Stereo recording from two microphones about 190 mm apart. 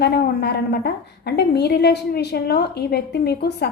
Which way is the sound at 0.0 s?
60° left (ahead or behind).